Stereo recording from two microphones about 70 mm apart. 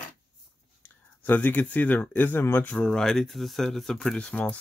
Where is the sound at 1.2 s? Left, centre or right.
Left.